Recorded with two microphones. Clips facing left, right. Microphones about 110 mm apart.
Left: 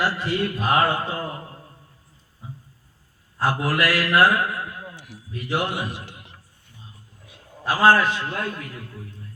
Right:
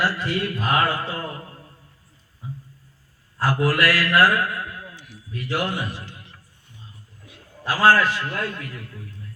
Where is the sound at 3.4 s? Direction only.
25° left (ahead or behind).